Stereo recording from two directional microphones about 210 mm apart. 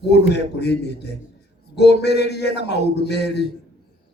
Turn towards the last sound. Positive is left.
turn(degrees=55)  # may be behind; listen again after turning